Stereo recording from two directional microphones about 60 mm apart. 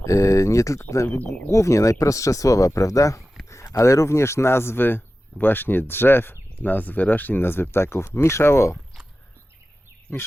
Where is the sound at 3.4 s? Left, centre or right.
Left.